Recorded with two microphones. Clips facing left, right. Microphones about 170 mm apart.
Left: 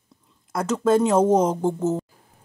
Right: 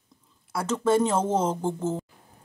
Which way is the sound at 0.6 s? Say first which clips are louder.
Left 3 dB; 10° left (ahead or behind).